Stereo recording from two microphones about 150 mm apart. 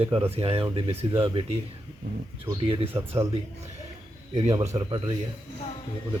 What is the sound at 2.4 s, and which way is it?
Speech, 30° right (ahead or behind).